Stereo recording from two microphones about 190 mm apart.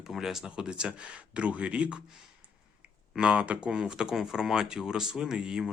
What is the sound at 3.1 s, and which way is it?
Speech, 5° right (ahead or behind).